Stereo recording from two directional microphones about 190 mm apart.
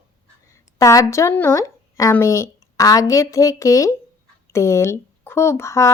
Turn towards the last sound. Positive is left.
turn(degrees=15)  # may be behind; listen again after turning